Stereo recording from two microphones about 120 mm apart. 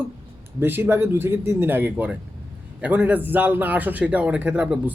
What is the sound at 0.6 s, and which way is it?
Speech, 15° right (ahead or behind).